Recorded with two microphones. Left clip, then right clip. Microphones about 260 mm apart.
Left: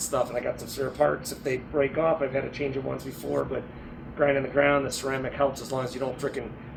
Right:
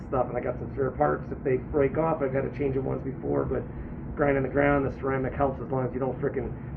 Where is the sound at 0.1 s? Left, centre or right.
Centre.